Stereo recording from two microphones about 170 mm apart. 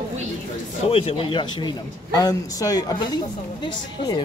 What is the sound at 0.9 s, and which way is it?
A man's voice, 35° left (ahead or behind).